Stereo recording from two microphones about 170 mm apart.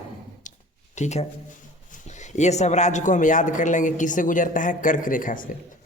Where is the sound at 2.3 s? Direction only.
40° left (ahead or behind).